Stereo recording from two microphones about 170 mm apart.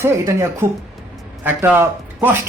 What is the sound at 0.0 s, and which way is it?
A man's voice, 15° right (ahead or behind).